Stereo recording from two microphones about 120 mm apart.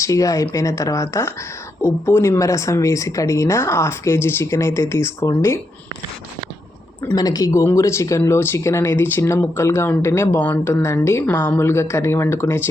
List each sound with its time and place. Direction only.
0.0 s speech: 25° left (ahead or behind)
7.2 s speech: 30° left (ahead or behind)